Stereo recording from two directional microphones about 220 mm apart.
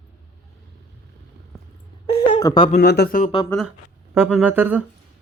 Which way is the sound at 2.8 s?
45° left (ahead or behind).